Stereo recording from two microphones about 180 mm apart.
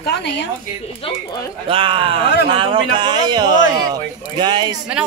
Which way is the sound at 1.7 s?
30° right (ahead or behind).